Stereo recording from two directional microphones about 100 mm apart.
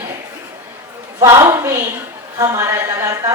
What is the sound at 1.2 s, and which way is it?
Speech, 30° right (ahead or behind).